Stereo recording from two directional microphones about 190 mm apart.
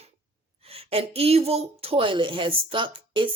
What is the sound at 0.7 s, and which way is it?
Speech, 30° right (ahead or behind).